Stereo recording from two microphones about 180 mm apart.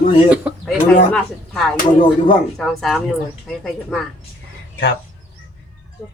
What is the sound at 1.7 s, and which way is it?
Speech, 50° left (ahead or behind).